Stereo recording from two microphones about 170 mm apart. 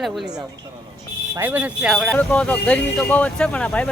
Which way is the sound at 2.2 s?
5° left (ahead or behind).